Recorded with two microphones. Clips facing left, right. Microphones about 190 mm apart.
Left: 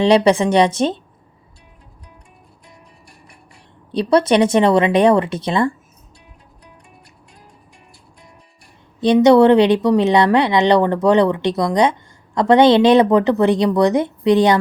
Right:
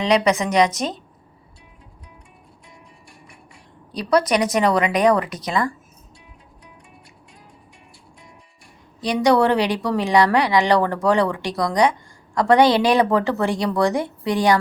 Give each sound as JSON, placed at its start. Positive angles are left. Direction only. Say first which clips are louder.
{"t": 0.0, "sound": "speech", "louder": "left 6 dB", "side_deg": 30}
{"t": 3.9, "sound": "speech", "louder": "left 5 dB", "side_deg": 25}
{"t": 9.0, "sound": "speech", "louder": "left 7 dB", "side_deg": 25}